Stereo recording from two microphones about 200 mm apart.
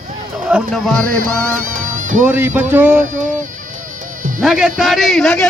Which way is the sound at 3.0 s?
40° right (ahead or behind).